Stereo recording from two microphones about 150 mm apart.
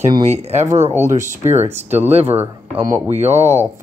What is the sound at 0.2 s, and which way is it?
Speech, 45° right (ahead or behind).